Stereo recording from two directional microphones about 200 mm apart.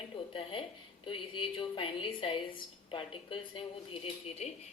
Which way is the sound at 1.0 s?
25° left (ahead or behind).